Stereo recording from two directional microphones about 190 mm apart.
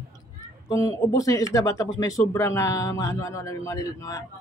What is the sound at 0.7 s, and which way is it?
Speech, 20° left (ahead or behind).